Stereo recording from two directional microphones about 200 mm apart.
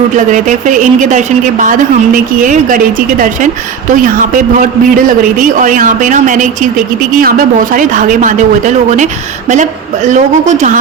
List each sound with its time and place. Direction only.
0.3 s a woman's voice: 40° right (ahead or behind)